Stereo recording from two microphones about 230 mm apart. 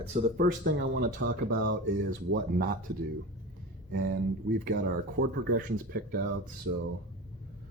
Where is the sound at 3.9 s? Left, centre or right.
Right.